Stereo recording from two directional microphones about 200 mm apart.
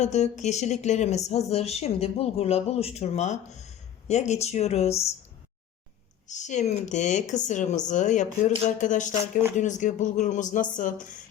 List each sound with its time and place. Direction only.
0.0 s speech: 35° left (ahead or behind)
6.2 s speech: 35° left (ahead or behind)